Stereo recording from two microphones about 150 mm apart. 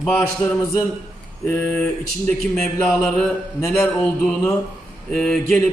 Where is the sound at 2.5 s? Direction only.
5° left (ahead or behind).